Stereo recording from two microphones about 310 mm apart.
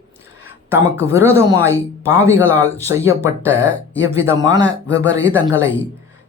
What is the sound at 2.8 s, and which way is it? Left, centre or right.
Speech, centre.